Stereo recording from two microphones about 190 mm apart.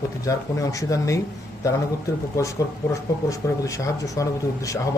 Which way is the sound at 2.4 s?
15° left (ahead or behind).